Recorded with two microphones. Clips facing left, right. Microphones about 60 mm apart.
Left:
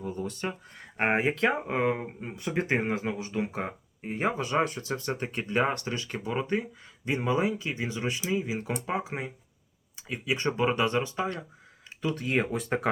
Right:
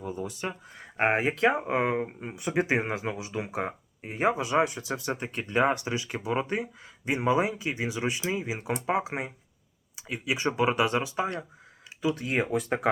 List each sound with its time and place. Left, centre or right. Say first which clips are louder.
0.0 s speech: even; centre
5.7 s speech: right 2 dB; centre
12.0 s speech: right 1 dB; centre